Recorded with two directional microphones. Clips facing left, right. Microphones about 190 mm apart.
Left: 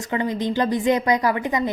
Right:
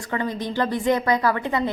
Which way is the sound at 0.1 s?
20° left (ahead or behind).